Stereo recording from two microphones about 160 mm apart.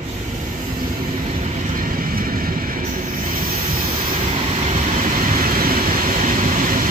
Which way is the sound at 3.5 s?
30° right (ahead or behind).